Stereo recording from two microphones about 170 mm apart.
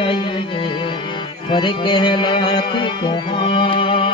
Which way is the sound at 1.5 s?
25° left (ahead or behind).